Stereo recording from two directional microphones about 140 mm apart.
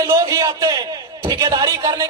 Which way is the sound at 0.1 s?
25° right (ahead or behind).